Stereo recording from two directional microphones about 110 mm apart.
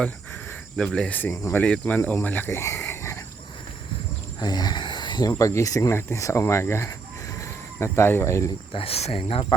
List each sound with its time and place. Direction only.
0.8 s speech: 10° left (ahead or behind)
1.3 s speech: 25° left (ahead or behind)
1.6 s speech: 15° left (ahead or behind)
4.4 s snake: 40° left (ahead or behind)
5.3 s speech: 30° left (ahead or behind)
8.7 s speech: 60° left (ahead or behind)